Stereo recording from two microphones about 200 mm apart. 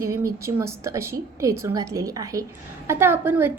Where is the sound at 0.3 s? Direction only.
15° right (ahead or behind).